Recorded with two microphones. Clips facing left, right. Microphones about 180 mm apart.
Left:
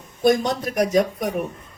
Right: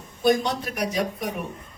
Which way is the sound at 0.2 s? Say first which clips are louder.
Left 3 dB; 45° left (ahead or behind).